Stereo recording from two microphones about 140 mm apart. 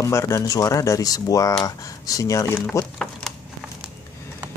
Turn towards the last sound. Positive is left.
turn(degrees=5)  # may be behind; listen again after turning